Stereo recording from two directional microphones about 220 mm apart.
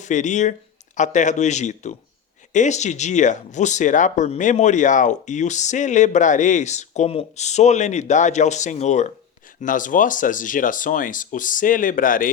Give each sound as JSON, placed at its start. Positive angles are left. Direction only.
{"t": 0.0, "sound": "speech", "side_deg": 35}